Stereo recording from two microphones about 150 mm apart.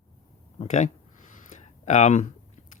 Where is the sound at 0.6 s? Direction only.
55° left (ahead or behind).